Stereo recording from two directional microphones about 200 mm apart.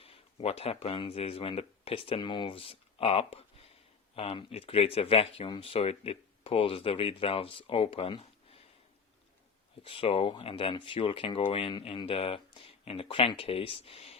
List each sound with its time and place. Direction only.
0.0 s speech: 30° left (ahead or behind)
9.8 s speech: 25° left (ahead or behind)